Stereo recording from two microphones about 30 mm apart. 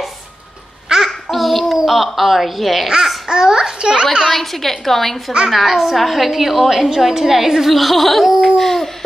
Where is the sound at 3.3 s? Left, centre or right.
Right.